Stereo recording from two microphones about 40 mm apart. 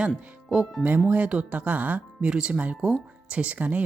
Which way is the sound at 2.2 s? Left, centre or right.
Right.